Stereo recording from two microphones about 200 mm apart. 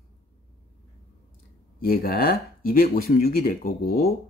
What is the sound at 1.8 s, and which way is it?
Speech, 50° left (ahead or behind).